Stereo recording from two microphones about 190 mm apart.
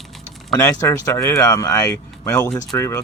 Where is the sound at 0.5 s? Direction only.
15° left (ahead or behind).